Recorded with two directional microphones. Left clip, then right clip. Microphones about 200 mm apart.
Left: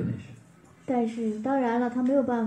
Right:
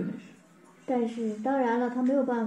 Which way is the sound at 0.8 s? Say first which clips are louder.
Left 1 dB; 30° left (ahead or behind).